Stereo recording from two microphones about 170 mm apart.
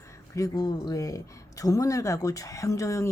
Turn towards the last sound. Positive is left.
turn(degrees=20)  # may be behind; listen again after turning